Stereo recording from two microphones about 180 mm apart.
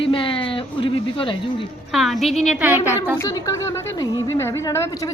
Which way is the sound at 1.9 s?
Centre (ahead or behind).